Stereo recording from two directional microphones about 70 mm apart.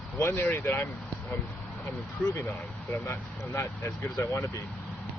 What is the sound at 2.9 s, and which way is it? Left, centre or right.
Speech, left.